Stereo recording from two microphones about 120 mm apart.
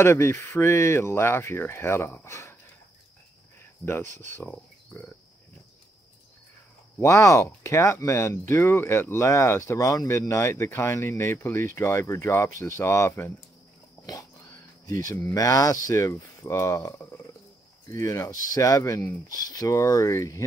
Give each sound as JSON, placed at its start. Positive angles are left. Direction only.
{"t": 0.0, "sound": "speech", "side_deg": 20}
{"t": 3.8, "sound": "speech", "side_deg": 20}
{"t": 4.1, "sound": "speech", "side_deg": -90}
{"t": 4.4, "sound": "speech", "side_deg": 15}
{"t": 7.0, "sound": "speech", "side_deg": 25}
{"t": 14.9, "sound": "speech", "side_deg": 30}